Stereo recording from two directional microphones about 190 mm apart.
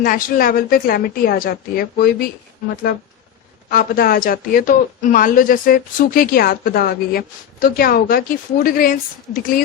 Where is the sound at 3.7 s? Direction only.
50° left (ahead or behind).